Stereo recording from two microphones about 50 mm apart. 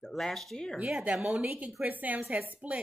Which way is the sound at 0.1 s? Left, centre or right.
Centre.